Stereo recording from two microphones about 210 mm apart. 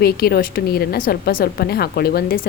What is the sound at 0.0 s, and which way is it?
A woman's voice, 50° left (ahead or behind).